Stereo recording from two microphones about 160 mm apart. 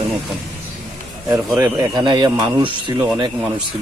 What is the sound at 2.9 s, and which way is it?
Speech, 10° right (ahead or behind).